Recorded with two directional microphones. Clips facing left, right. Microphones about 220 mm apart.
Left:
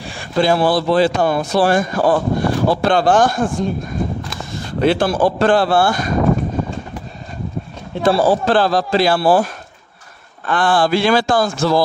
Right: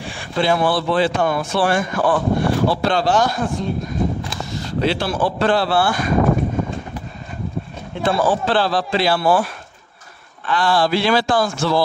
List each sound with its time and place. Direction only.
0.4 s speech: 40° left (ahead or behind)
8.0 s a man's voice: 35° left (ahead or behind)
10.4 s a man's voice: 50° left (ahead or behind)